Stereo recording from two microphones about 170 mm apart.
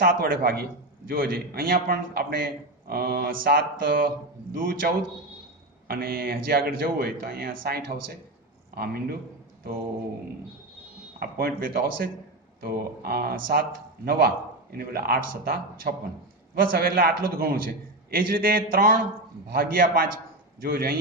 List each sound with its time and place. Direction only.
0.0 s a man's voice: 60° right (ahead or behind)
11.1 s a man's voice: 60° right (ahead or behind)